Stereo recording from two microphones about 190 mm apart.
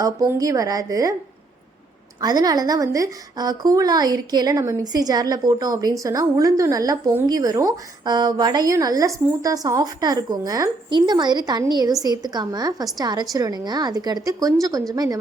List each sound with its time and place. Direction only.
0.0 s a woman's voice: 20° right (ahead or behind)
2.2 s a woman's voice: 20° right (ahead or behind)